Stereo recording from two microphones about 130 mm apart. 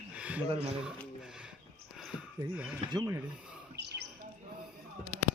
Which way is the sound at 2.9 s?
25° right (ahead or behind).